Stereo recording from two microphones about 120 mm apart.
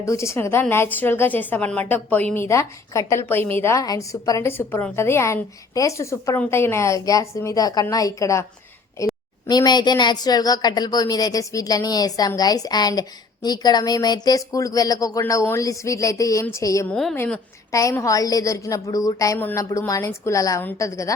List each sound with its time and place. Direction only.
0.0 s a woman's voice: 25° left (ahead or behind)
9.5 s a woman's voice: 35° left (ahead or behind)
16.9 s a woman's voice: 5° left (ahead or behind)
17.7 s a woman's voice: 25° left (ahead or behind)